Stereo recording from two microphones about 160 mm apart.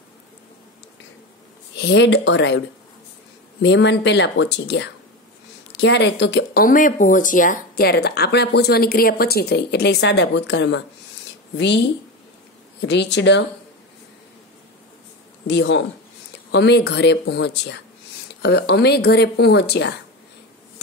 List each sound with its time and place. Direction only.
1.8 s speech: 90° left
3.6 s speech: 90° left
12.8 s speech: 90° left
15.4 s speech: 90° left